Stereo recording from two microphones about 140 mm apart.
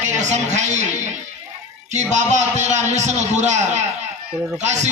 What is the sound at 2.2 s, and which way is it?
A man's voice, 55° right (ahead or behind).